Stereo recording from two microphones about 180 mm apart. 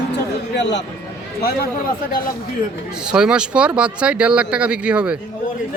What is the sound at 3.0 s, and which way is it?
Speech, 5° right (ahead or behind).